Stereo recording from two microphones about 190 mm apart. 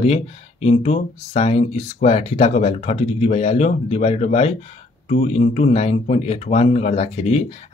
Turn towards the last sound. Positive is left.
turn(degrees=35)  # may be behind; listen again after turning